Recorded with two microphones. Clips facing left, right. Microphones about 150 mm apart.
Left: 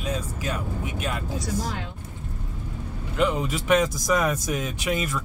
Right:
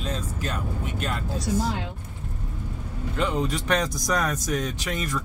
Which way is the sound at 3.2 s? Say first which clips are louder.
Left 2 dB; 5° left (ahead or behind).